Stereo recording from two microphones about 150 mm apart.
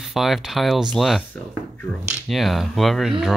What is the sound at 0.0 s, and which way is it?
Speech, centre (ahead or behind).